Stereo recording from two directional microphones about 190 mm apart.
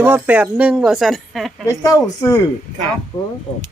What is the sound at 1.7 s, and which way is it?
Speech, 15° left (ahead or behind).